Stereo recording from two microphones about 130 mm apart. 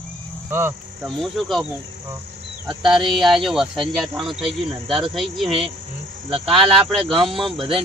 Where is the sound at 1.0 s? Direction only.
Centre (ahead or behind).